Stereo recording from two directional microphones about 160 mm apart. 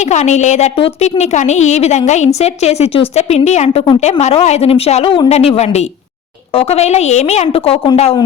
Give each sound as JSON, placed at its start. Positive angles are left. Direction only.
{"t": 0.0, "sound": "a woman's voice", "side_deg": 45}